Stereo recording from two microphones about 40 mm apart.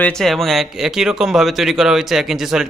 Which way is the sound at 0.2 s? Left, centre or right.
Centre.